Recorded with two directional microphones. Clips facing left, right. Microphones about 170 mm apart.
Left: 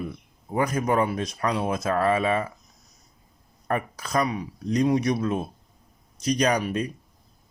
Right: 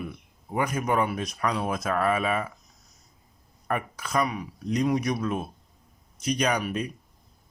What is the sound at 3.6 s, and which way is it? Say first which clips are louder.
A man's voice: left 2 dB; 35° left (ahead or behind).